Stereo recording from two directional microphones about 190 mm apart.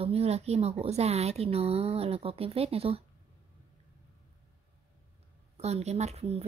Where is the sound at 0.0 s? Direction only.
30° right (ahead or behind).